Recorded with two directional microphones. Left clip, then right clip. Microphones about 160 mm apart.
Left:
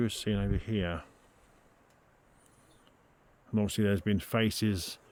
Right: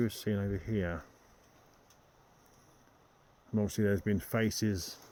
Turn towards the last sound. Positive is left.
turn(degrees=35)  # may be behind; listen again after turning